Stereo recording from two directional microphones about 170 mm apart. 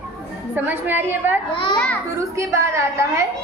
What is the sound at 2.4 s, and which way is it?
Speech, 15° right (ahead or behind).